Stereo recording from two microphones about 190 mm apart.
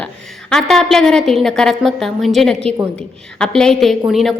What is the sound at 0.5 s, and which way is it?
A woman's voice, centre (ahead or behind).